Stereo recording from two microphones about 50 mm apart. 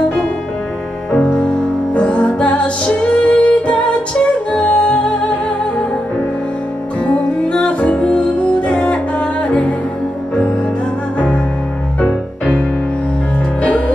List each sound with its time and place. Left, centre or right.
2.0 s music: left
7.1 s music: left
12.0 s music: left